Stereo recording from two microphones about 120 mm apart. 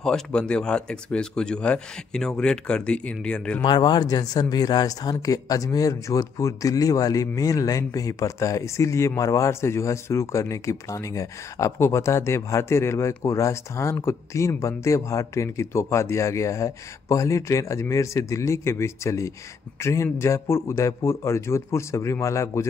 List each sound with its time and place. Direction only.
0.0 s speech: 5° left (ahead or behind)
3.6 s speech: 40° left (ahead or behind)